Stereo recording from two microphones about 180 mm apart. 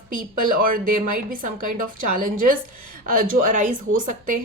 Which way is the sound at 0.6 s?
50° right (ahead or behind).